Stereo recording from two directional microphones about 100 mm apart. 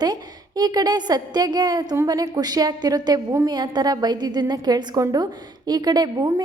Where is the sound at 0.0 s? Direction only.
45° right (ahead or behind).